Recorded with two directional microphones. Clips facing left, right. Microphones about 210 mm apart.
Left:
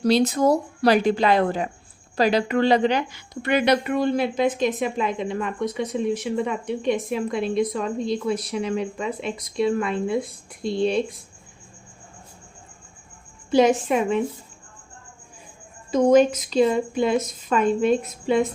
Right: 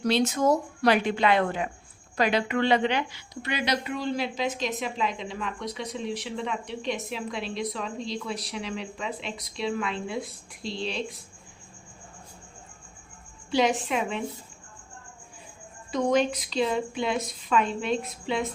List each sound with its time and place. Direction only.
0.0 s a woman's voice: 35° left (ahead or behind); by 11.0 s 50° left (ahead or behind)
13.5 s speech: 45° left (ahead or behind)
15.9 s speech: 45° left (ahead or behind)